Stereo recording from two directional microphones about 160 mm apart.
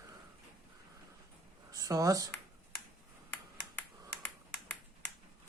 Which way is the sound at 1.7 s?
20° right (ahead or behind).